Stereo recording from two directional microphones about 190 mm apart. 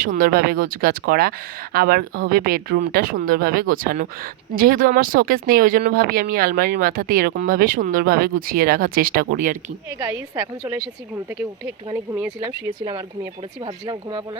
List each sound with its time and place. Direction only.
0.0 s speech: 50° right (ahead or behind)
10.0 s speech: 10° right (ahead or behind)
12.8 s speech: 25° right (ahead or behind)